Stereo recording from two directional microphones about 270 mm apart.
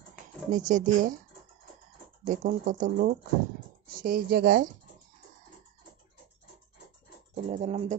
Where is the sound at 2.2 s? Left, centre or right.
Right.